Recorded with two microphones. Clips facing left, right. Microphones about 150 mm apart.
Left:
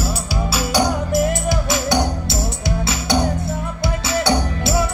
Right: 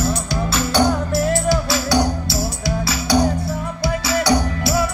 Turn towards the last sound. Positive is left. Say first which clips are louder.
# right 1 dB
turn(degrees=25)  # may be behind; listen again after turning